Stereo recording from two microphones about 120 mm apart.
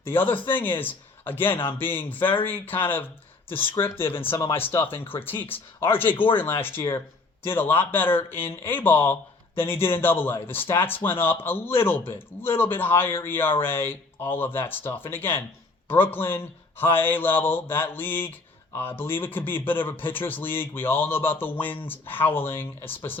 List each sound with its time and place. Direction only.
0.0 s a man's voice: 15° left (ahead or behind)